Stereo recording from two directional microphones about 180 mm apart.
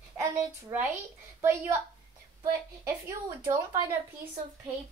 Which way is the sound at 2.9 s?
15° right (ahead or behind).